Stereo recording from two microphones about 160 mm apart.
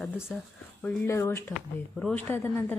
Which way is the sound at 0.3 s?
10° left (ahead or behind).